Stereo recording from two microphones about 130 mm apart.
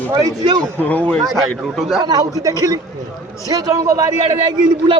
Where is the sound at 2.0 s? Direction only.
30° right (ahead or behind).